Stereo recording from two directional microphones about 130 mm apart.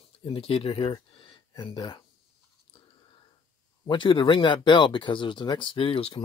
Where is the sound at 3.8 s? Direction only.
40° left (ahead or behind).